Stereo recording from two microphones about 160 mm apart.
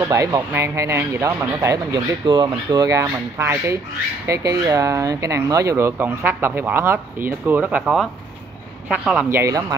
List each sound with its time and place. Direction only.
0.1 s speech: 20° right (ahead or behind)
9.4 s speech: 20° right (ahead or behind)